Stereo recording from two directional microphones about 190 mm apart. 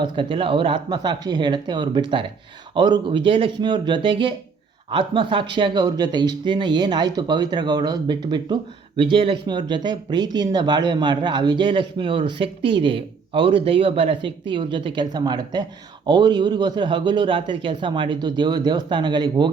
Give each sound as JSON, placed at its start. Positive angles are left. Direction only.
{"t": 0.0, "sound": "speech", "side_deg": -25}